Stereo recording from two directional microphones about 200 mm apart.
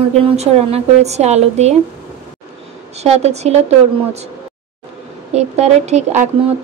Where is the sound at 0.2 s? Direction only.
30° right (ahead or behind).